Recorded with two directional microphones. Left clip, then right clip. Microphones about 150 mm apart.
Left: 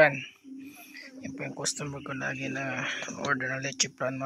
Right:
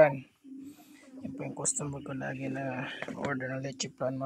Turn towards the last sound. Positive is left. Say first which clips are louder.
# left 4 dB
turn(degrees=-5)  # may be behind; listen again after turning